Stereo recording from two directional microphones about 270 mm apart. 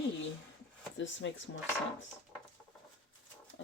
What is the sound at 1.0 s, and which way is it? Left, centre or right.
Speech, left.